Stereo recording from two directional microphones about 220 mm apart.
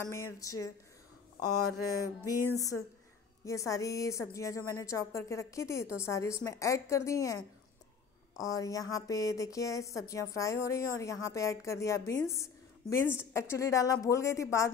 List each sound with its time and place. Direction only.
0.1 s a woman's voice: 15° left (ahead or behind)
1.5 s a sound: 90° left
2.2 s a woman's voice: 15° left (ahead or behind)
8.4 s a woman's voice: 15° left (ahead or behind)